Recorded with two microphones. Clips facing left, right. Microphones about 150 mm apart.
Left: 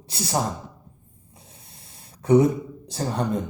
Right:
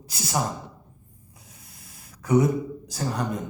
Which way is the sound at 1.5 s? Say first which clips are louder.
Even; 30° left (ahead or behind).